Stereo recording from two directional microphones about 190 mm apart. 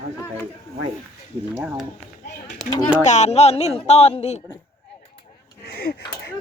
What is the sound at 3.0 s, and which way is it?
A woman's voice, 35° left (ahead or behind).